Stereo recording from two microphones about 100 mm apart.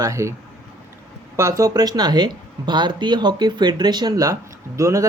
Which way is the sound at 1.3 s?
35° right (ahead or behind).